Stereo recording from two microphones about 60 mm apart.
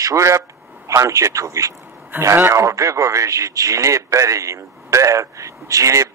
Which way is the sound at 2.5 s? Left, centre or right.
Right.